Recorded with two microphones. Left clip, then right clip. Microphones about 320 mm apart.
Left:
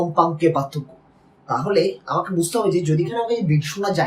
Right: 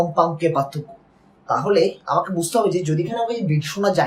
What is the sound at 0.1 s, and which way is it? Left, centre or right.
Speech, centre.